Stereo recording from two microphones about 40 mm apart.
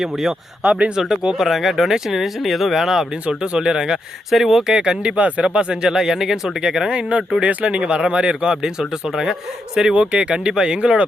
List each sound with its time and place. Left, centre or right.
0.0 s speech: centre
0.6 s speech: right
0.9 s speech: centre
1.4 s speech: centre
3.1 s speech: right
4.3 s speech: centre
4.7 s speech: right
7.1 s speech: right
8.8 s speech: centre
9.9 s speech: right